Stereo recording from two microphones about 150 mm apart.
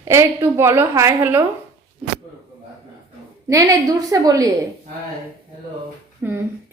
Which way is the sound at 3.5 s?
20° right (ahead or behind).